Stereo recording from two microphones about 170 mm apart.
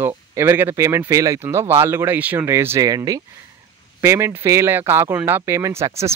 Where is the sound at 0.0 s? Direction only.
15° right (ahead or behind).